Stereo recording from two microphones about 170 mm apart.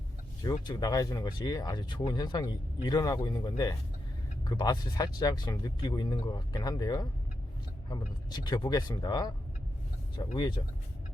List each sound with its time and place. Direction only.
0.4 s speech: 25° left (ahead or behind)
10.3 s speech: 25° left (ahead or behind)